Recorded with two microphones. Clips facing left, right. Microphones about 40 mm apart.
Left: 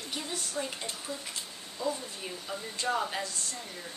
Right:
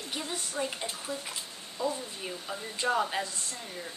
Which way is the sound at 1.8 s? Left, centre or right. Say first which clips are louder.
Right 1 dB; centre.